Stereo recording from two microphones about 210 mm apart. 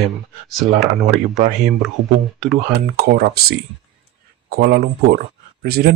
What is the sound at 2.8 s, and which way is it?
Speech, 45° right (ahead or behind).